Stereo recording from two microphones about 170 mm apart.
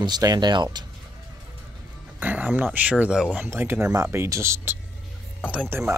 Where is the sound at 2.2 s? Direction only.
10° right (ahead or behind).